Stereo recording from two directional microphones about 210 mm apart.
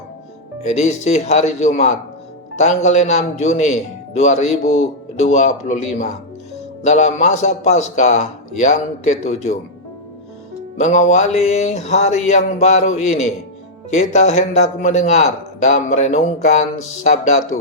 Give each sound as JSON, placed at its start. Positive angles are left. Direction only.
{"t": 0.6, "sound": "a man's voice", "side_deg": 35}
{"t": 10.8, "sound": "a man's voice", "side_deg": 35}